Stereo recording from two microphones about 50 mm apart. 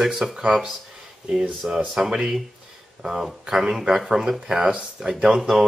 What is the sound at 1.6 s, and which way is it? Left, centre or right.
Speech, right.